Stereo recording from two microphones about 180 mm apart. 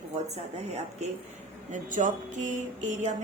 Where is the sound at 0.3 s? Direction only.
35° right (ahead or behind).